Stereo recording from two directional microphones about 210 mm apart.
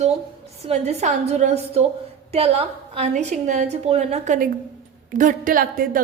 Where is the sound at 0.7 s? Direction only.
30° right (ahead or behind).